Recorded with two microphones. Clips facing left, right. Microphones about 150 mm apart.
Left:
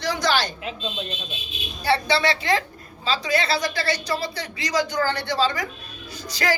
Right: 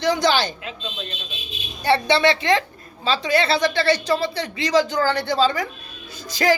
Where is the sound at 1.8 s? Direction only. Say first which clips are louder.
Right 4 dB; 25° right (ahead or behind).